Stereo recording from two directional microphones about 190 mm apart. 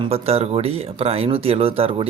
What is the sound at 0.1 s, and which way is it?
Speech, 30° right (ahead or behind).